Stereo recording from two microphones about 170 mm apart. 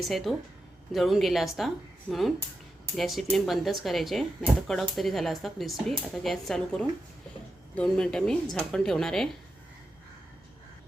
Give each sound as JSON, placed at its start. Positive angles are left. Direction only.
{"t": 0.0, "sound": "speech", "side_deg": 0}